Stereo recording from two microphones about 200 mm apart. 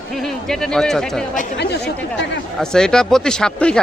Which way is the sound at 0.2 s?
Centre (ahead or behind).